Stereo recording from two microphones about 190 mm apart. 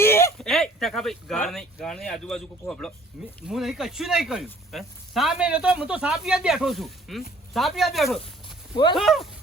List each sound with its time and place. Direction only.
0.0 s a sound: 15° left (ahead or behind)
0.3 s speech: centre (ahead or behind)
8.7 s speech: 25° left (ahead or behind)
9.0 s speech: centre (ahead or behind)